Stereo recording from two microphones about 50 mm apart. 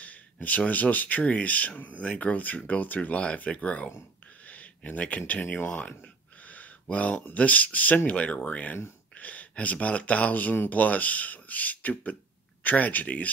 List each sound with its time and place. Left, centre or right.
0.0 s speech: left
6.4 s a sound: left
7.3 s speech: left